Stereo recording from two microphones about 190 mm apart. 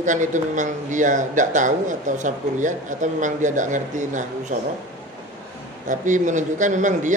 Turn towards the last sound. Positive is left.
turn(degrees=-40)  # may be behind; listen again after turning